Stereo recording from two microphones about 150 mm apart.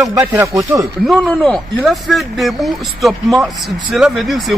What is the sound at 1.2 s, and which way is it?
Speech, 5° left (ahead or behind).